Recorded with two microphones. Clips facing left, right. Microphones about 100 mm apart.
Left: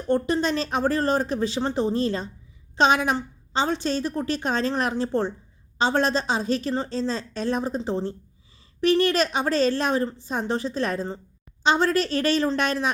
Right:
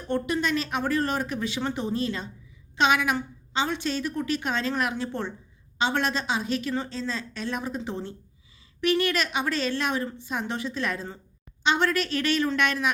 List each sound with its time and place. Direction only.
0.1 s a woman's voice: 35° left (ahead or behind)